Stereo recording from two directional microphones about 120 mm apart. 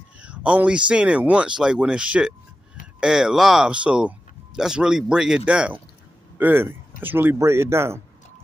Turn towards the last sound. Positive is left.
turn(degrees=-20)  # may be behind; listen again after turning